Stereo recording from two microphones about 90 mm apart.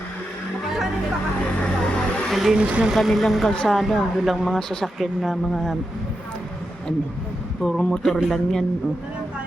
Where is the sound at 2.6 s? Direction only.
15° right (ahead or behind).